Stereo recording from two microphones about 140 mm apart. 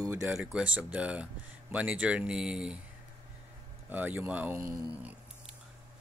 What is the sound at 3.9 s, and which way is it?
Speech, 15° right (ahead or behind).